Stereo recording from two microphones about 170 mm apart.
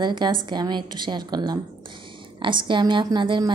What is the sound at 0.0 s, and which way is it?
A woman's voice, 25° right (ahead or behind).